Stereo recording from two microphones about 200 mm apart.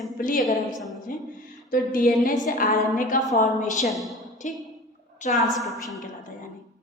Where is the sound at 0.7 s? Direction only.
Centre (ahead or behind).